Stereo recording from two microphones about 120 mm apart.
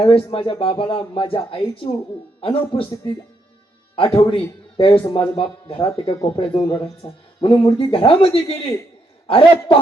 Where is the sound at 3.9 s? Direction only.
50° left (ahead or behind).